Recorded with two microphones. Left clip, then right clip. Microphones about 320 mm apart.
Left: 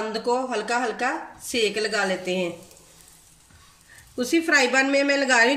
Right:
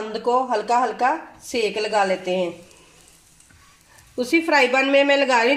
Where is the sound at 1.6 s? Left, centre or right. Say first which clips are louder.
Right 3 dB; centre.